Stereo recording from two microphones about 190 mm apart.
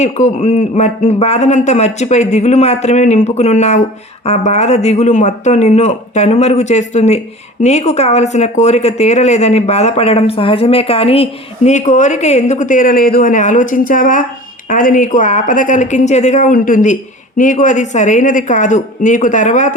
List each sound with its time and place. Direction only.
0.0 s speech: 35° left (ahead or behind)